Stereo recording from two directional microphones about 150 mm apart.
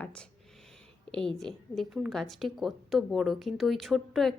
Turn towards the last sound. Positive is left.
turn(degrees=0)  # may be behind; listen again after turning